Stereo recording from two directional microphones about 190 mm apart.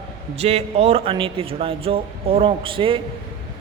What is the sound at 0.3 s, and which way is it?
A man's voice, 30° right (ahead or behind).